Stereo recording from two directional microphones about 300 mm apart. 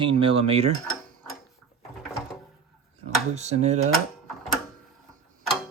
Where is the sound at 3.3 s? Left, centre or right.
Right.